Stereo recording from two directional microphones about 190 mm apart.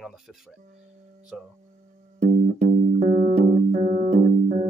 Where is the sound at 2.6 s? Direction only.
35° right (ahead or behind).